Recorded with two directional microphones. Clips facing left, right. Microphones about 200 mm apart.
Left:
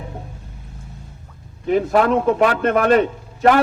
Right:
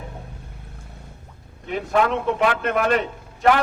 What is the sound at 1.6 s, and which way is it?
A man's voice, 40° left (ahead or behind).